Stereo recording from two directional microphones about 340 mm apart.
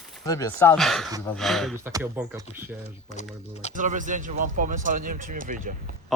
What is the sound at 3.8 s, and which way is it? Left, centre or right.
Speech, right.